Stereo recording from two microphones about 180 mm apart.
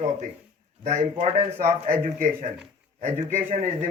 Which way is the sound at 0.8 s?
40° right (ahead or behind).